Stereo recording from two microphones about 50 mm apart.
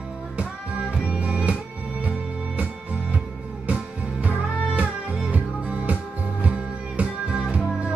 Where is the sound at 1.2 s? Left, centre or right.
Right.